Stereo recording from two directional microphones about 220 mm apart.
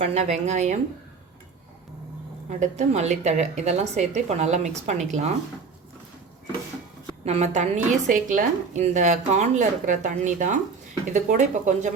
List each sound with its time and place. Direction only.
0.0 s a woman's voice: 30° right (ahead or behind)
2.5 s a woman's voice: 35° right (ahead or behind)
7.3 s a woman's voice: 30° right (ahead or behind)